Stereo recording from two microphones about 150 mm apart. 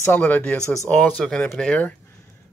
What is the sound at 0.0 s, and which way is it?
Speech, 10° left (ahead or behind).